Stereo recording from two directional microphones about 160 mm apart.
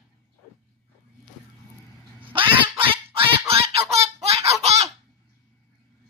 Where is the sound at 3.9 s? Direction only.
40° right (ahead or behind).